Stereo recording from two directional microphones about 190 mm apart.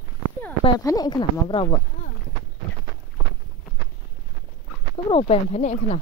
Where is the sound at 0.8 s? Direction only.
20° left (ahead or behind).